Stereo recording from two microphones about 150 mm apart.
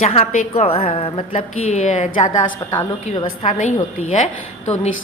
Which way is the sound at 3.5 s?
60° left (ahead or behind).